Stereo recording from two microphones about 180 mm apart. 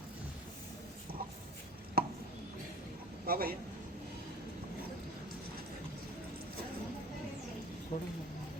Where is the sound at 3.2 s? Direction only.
55° right (ahead or behind).